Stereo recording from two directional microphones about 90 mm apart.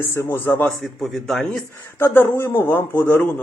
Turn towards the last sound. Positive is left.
turn(degrees=25)  # may be behind; listen again after turning